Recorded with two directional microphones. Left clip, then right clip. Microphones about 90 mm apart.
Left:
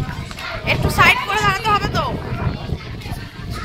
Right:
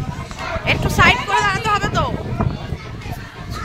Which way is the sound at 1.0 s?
Centre (ahead or behind).